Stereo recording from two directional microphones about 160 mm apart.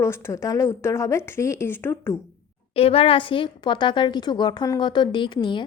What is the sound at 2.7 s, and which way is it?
A woman's voice, 35° left (ahead or behind).